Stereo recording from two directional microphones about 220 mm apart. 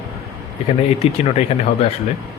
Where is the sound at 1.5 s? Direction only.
30° left (ahead or behind).